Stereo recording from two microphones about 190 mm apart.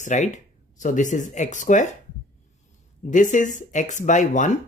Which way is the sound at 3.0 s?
40° left (ahead or behind).